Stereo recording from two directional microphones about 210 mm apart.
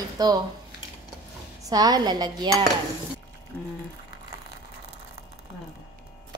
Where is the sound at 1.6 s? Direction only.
20° right (ahead or behind).